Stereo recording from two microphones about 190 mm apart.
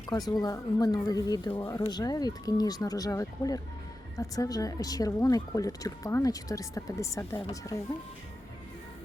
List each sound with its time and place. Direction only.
0.1 s speech: 20° left (ahead or behind)